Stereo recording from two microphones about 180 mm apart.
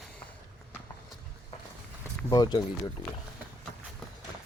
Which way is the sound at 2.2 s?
25° left (ahead or behind).